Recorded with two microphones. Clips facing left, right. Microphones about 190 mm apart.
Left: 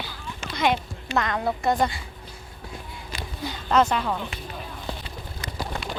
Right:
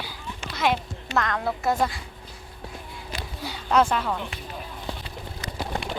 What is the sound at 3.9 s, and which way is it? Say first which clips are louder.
Speech: even; centre (ahead or behind).